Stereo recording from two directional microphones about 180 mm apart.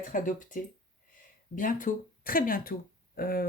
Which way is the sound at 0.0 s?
45° left (ahead or behind).